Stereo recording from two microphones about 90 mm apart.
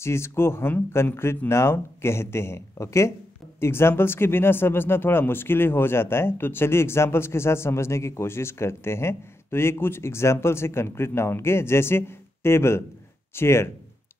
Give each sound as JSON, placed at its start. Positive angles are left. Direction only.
{"t": 0.0, "sound": "speech", "side_deg": 30}